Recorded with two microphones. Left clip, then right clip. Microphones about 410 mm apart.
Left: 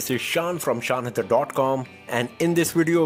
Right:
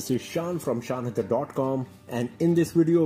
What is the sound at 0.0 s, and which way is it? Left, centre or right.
Speech, left.